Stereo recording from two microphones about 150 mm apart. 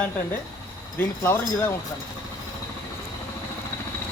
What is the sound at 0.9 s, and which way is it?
Speech, 15° left (ahead or behind).